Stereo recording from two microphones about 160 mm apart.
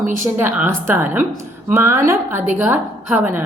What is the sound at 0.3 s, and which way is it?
A woman's voice, 10° right (ahead or behind).